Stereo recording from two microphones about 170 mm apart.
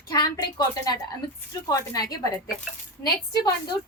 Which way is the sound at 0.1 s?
25° left (ahead or behind).